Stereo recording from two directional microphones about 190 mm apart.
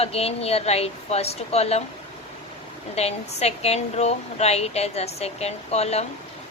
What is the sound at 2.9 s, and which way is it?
Speech, 35° left (ahead or behind).